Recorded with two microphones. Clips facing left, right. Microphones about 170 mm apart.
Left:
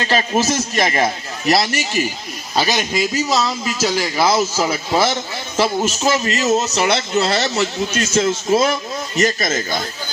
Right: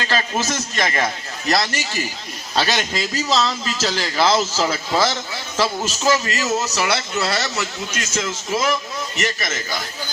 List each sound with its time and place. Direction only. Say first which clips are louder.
0.0 s a man's voice: left 5 dB; 20° left (ahead or behind); by 9.6 s 35° left (ahead or behind)